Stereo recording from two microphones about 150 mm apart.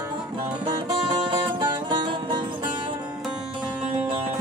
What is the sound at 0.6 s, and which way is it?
Music, 30° right (ahead or behind).